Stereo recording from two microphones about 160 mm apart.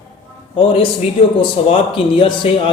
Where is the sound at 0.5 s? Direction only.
35° left (ahead or behind).